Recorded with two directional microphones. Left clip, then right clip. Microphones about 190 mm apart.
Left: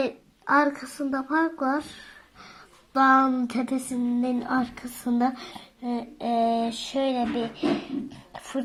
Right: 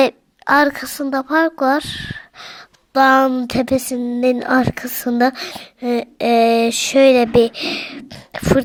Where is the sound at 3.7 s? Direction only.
55° right (ahead or behind).